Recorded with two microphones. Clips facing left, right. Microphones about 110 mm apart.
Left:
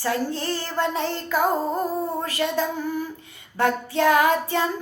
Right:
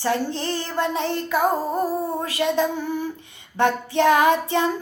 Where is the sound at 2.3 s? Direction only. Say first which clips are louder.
Right 4 dB; 20° right (ahead or behind).